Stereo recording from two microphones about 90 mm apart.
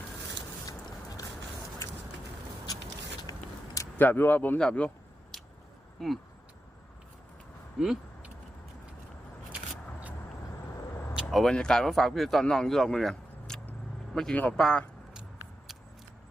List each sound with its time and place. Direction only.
3.3 s a sound: 40° left (ahead or behind)
3.9 s speech: 20° left (ahead or behind)
6.0 s speech: centre (ahead or behind)
7.8 s a sound: 5° right (ahead or behind)
11.1 s speech: 5° right (ahead or behind)
14.3 s speech: 20° left (ahead or behind)